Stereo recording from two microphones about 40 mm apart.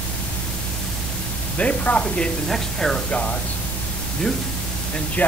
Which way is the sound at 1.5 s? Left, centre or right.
Left.